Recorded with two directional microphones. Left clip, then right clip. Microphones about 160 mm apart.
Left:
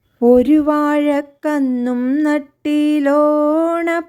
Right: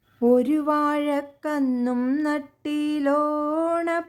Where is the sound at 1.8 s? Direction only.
25° left (ahead or behind).